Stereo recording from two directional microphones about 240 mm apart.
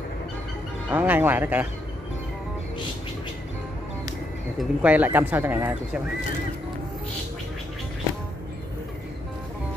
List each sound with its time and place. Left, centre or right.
0.8 s speech: centre
4.6 s speech: centre